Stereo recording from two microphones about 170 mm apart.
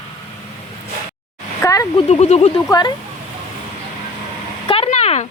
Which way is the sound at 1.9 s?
40° left (ahead or behind).